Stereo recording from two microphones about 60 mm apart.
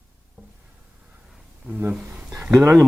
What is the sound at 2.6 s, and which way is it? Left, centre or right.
Speech, right.